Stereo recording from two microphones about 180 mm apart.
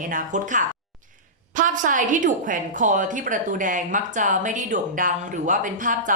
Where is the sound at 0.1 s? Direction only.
45° right (ahead or behind).